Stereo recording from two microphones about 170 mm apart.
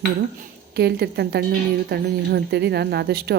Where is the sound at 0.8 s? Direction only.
70° right (ahead or behind).